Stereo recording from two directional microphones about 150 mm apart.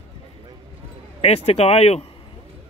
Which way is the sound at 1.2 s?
45° left (ahead or behind).